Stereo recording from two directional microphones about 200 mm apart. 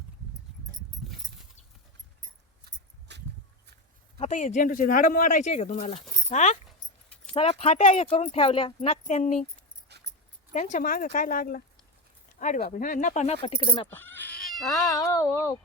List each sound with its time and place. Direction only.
3.1 s a sound: 60° right (ahead or behind)
4.2 s speech: 40° left (ahead or behind)
6.7 s keys jangling: 5° left (ahead or behind)
7.3 s speech: 30° left (ahead or behind)
9.9 s dog: 60° right (ahead or behind)
10.5 s speech: 40° left (ahead or behind)
13.9 s cat: 10° left (ahead or behind)